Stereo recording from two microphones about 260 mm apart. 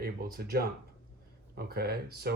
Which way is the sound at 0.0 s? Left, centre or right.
Right.